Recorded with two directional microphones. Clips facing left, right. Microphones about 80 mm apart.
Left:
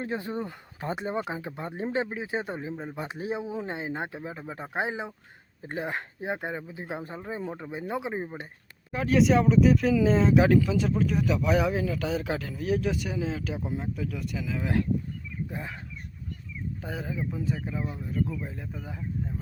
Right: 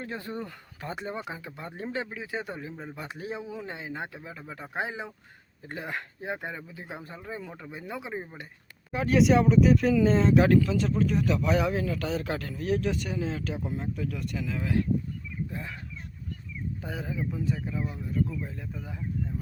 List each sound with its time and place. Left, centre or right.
0.0 s speech: left
8.9 s speech: centre
15.4 s speech: centre
16.8 s speech: centre